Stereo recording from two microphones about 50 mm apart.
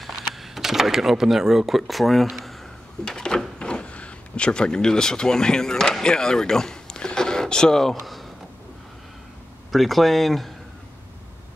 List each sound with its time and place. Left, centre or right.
0.0 s speech: centre
3.1 s speech: centre
9.7 s speech: centre